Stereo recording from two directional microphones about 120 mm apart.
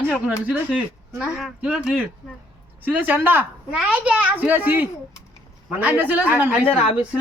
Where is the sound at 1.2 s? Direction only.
Centre (ahead or behind).